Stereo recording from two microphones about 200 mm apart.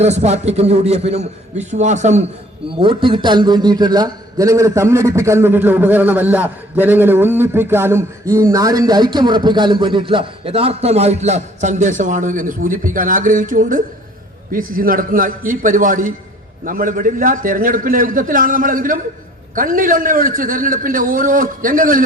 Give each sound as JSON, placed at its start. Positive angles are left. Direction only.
{"t": 0.0, "sound": "a man's voice", "side_deg": -35}
{"t": 2.8, "sound": "a man's voice", "side_deg": -25}